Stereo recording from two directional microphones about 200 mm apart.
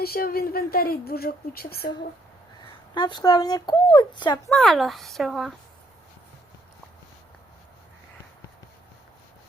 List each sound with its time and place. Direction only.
0.0 s speech: 50° left (ahead or behind)
2.9 s speech: 20° left (ahead or behind)
4.4 s speech: centre (ahead or behind)